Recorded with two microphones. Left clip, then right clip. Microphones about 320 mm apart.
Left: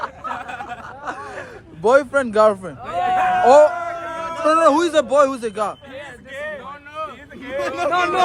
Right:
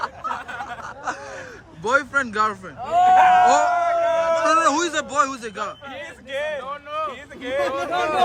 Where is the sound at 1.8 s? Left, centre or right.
Centre.